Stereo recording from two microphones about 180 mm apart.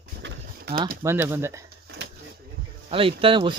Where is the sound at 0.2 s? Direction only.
80° right.